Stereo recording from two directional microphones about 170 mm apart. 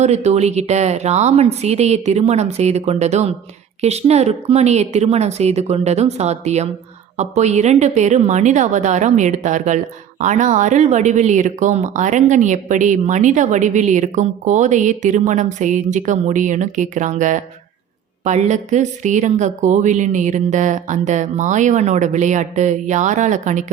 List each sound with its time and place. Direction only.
0.0 s a woman's voice: 40° right (ahead or behind)